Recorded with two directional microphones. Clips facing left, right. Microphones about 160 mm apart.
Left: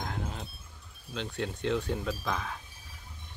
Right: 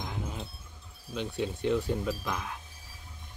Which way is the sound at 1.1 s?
10° right (ahead or behind).